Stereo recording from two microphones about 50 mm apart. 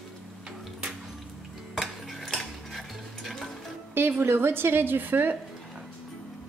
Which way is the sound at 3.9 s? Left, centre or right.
Right.